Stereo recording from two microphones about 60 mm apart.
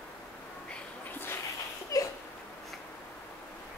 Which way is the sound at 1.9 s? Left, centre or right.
Left.